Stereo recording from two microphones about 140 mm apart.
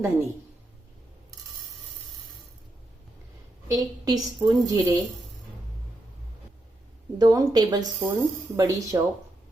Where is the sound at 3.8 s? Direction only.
25° right (ahead or behind).